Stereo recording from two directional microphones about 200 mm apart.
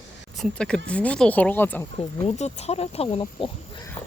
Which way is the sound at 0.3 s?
Centre (ahead or behind).